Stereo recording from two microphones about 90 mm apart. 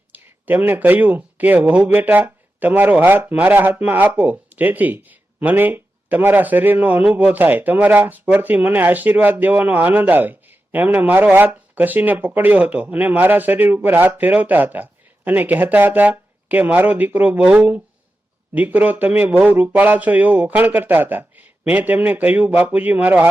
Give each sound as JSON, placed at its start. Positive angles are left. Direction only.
{"t": 0.1, "sound": "speech", "side_deg": -20}